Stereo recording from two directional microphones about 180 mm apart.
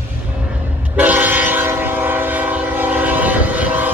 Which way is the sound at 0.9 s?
10° right (ahead or behind).